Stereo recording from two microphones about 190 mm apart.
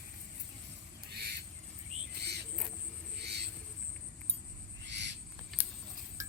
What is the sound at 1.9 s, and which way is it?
Bird, 35° right (ahead or behind).